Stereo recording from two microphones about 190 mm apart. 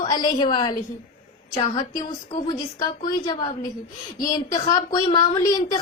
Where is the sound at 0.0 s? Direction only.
20° left (ahead or behind).